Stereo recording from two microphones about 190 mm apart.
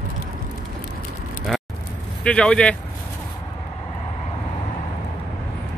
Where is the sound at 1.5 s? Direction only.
Centre (ahead or behind).